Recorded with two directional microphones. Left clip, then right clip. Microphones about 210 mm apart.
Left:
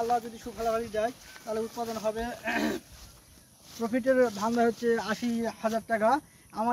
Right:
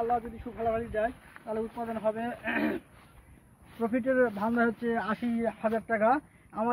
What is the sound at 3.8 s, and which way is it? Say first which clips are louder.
Speech: left 2 dB; 35° right (ahead or behind).